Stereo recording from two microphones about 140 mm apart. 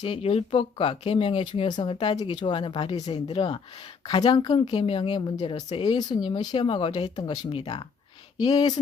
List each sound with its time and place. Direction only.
0.0 s speech: 45° left (ahead or behind)